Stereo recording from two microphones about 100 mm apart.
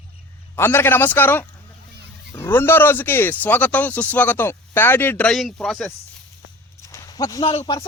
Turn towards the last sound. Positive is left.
turn(degrees=65)  # may be behind; listen again after turning